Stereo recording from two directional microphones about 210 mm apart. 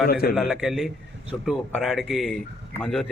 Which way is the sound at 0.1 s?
45° left (ahead or behind).